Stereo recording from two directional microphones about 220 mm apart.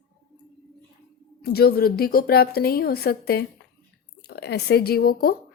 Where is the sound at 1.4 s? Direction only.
45° left (ahead or behind).